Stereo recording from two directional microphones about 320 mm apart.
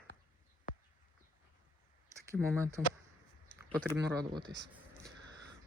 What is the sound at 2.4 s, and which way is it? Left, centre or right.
Speech, centre.